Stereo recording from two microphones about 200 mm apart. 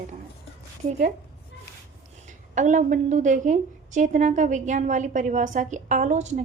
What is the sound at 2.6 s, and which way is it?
A woman's voice, 40° right (ahead or behind).